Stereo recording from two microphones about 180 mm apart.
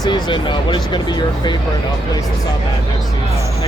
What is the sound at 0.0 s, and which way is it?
Speech, 25° left (ahead or behind).